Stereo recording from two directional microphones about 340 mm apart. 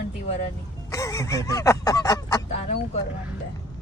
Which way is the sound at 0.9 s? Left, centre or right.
Centre.